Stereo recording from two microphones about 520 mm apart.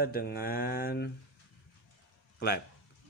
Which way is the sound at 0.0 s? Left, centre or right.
Centre.